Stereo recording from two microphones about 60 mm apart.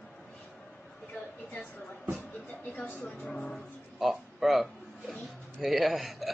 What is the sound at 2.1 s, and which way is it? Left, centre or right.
Speech, left.